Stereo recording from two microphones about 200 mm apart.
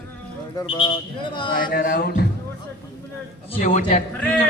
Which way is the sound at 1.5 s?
45° left (ahead or behind).